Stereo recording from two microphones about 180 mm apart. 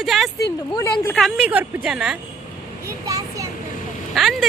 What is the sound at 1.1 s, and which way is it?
A woman's voice, centre (ahead or behind).